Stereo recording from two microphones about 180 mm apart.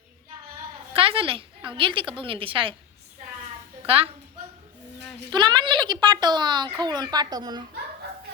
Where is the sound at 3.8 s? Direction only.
30° right (ahead or behind).